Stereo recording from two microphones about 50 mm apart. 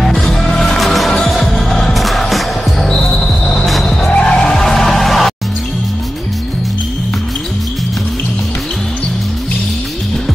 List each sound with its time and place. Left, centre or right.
0.0 s music: centre
2.9 s basketball bounce: centre
3.8 s music: centre
4.1 s skidding: left
4.5 s music: centre